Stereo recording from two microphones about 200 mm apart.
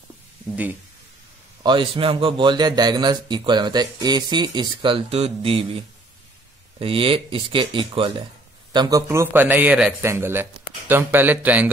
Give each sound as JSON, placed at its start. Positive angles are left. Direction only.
{"t": 1.6, "sound": "a man's voice", "side_deg": -25}